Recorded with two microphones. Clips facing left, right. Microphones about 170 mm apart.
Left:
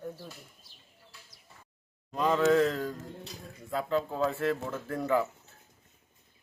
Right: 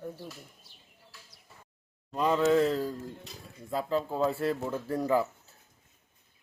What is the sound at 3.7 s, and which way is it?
Speech, 30° right (ahead or behind).